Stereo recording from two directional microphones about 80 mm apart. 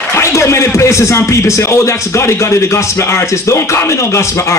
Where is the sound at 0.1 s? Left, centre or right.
Left.